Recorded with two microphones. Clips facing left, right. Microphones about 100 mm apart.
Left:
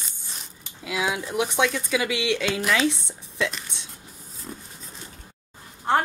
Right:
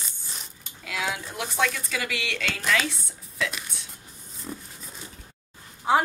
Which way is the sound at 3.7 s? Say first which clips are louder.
Left 2 dB; 20° left (ahead or behind).